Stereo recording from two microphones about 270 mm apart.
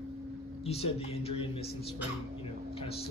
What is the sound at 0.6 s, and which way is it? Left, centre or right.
Speech, left.